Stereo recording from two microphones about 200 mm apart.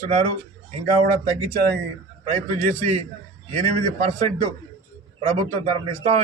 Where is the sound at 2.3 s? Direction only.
35° right (ahead or behind).